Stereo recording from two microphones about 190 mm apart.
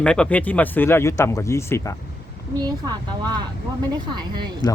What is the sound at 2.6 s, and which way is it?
Speech, 20° right (ahead or behind).